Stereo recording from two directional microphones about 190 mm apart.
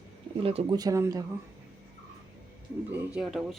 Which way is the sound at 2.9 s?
5° right (ahead or behind).